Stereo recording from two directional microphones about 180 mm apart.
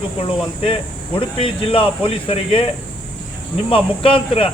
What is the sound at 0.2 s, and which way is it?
Speech, 30° left (ahead or behind).